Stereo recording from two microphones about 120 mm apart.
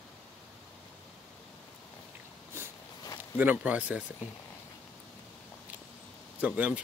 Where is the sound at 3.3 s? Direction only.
15° right (ahead or behind).